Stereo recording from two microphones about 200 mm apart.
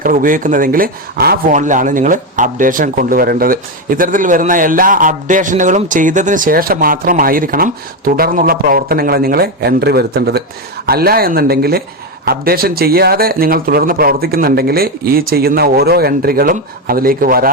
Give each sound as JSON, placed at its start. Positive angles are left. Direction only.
{"t": 0.0, "sound": "speech", "side_deg": -45}